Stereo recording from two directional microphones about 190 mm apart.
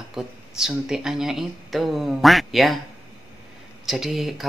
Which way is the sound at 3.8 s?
Centre (ahead or behind).